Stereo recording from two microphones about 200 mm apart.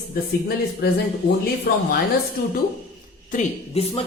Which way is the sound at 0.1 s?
50° left (ahead or behind).